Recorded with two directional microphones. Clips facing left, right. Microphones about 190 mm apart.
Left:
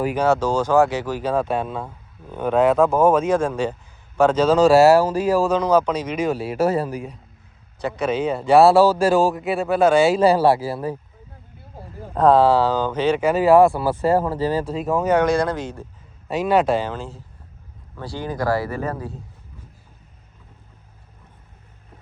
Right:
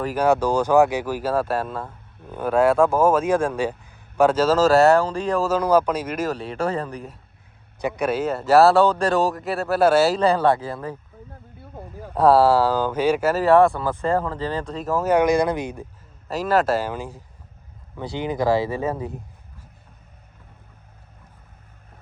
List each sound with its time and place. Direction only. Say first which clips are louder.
0.0 s speech: left 2 dB; centre (ahead or behind)
0.3 s speech: right 2 dB; 15° right (ahead or behind); by 5.5 s 10° left (ahead or behind)
5.5 s speech: left 1 dB; 5° right (ahead or behind)
6.3 s speech: left 5 dB; 5° left (ahead or behind)
7.8 s speech: left 1 dB; 15° right (ahead or behind)
10.2 s speech: left 3 dB; 10° left (ahead or behind)
12.1 s speech: left 1 dB; 10° right (ahead or behind)
16.3 s speech: left 2 dB; centre (ahead or behind); by 19.2 s 20° right (ahead or behind)